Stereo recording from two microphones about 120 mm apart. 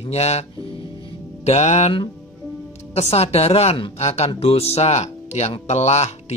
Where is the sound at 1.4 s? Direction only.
70° left (ahead or behind).